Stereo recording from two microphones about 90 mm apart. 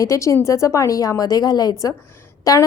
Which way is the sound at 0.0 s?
35° left (ahead or behind).